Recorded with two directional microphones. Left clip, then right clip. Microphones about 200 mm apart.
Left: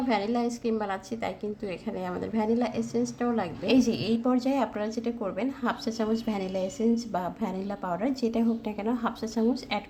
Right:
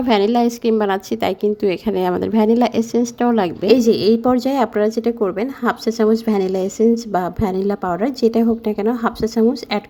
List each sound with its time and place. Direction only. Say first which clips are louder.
0.1 s a woman's voice: right 14 dB; 45° right (ahead or behind)